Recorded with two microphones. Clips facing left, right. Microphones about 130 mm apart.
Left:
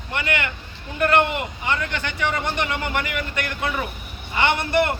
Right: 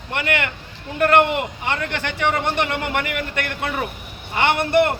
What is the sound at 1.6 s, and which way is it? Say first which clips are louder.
A man's voice: right 1 dB; 60° right (ahead or behind).